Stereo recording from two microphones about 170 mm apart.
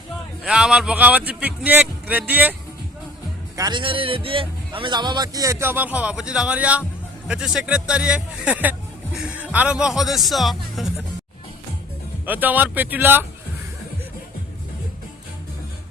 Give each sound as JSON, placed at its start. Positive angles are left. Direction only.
{"t": 0.4, "sound": "speech", "side_deg": -5}
{"t": 3.6, "sound": "a man's voice", "side_deg": -25}
{"t": 12.2, "sound": "speech", "side_deg": -10}